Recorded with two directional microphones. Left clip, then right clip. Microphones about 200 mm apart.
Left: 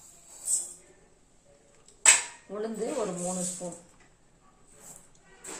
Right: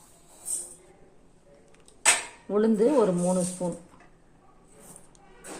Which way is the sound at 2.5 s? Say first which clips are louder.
Right 11 dB; 55° right (ahead or behind).